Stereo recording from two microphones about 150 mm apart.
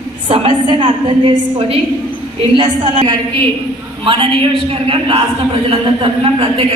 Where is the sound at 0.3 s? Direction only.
35° right (ahead or behind).